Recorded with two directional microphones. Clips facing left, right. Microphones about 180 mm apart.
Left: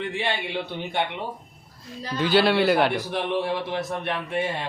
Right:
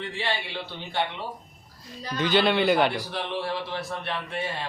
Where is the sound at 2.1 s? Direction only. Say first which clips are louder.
Left 2 dB; 5° left (ahead or behind).